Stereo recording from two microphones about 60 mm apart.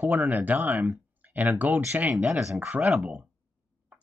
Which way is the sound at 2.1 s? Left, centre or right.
Centre.